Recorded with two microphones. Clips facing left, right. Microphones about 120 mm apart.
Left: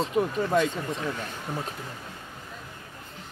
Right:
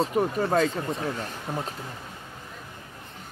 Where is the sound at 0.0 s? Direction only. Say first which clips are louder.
Right 1 dB; 35° right (ahead or behind).